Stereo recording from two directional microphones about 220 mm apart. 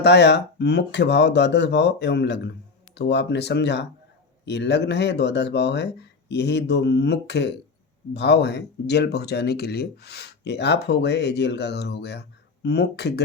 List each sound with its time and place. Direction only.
0.0 s speech: 50° left (ahead or behind)